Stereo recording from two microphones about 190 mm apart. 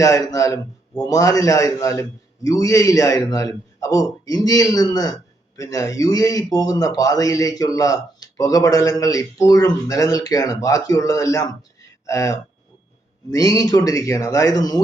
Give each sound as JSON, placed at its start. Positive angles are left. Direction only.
{"t": 0.0, "sound": "a man's voice", "side_deg": 15}